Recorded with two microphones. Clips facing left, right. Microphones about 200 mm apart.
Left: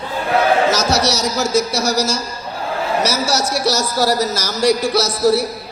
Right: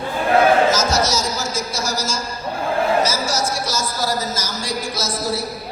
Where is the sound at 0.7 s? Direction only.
70° left (ahead or behind).